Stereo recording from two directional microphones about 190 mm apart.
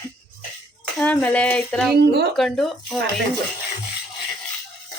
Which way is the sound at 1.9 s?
60° right (ahead or behind).